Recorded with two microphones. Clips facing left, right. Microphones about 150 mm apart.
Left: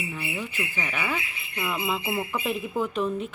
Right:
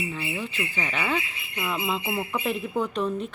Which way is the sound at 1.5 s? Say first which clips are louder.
Even; centre (ahead or behind).